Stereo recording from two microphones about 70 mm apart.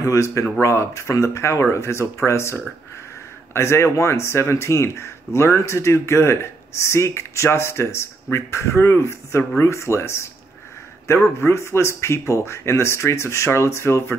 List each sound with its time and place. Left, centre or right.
0.0 s speech: left
11.3 s speech: left